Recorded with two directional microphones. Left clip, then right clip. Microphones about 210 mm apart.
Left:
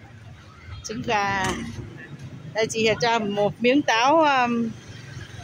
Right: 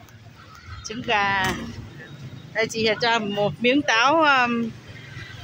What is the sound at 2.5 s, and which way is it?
Speech, 10° left (ahead or behind).